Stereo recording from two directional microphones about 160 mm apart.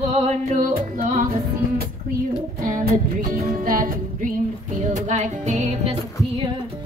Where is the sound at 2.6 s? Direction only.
65° right (ahead or behind); by 5.9 s 45° right (ahead or behind).